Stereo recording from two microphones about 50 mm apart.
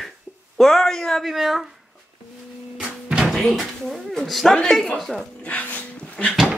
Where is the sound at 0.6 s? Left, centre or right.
Centre.